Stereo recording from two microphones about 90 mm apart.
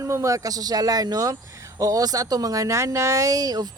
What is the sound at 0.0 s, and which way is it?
Speech, 35° right (ahead or behind).